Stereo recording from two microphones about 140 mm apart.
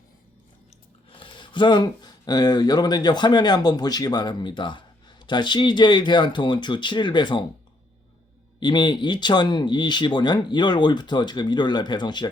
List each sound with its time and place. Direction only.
1.1 s speech: 40° left (ahead or behind)
8.6 s speech: 30° left (ahead or behind)